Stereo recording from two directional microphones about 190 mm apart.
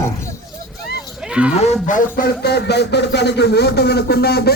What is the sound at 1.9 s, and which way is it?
Speech, 45° left (ahead or behind).